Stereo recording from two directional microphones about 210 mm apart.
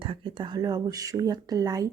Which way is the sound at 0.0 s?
25° right (ahead or behind).